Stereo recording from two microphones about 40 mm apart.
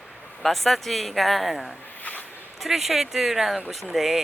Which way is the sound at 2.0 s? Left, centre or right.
Left.